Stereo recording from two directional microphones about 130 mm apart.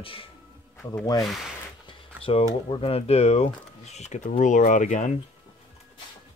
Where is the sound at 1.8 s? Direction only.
45° left (ahead or behind).